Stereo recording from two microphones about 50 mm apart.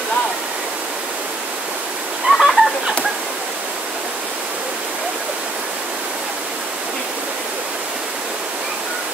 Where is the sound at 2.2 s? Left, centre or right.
Centre.